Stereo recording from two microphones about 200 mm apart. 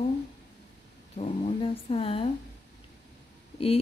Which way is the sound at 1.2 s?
30° left (ahead or behind).